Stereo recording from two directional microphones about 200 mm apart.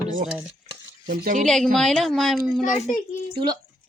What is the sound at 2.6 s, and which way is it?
Speech, 40° left (ahead or behind).